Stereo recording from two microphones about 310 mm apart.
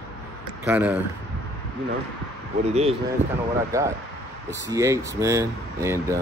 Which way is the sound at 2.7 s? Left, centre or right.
Centre.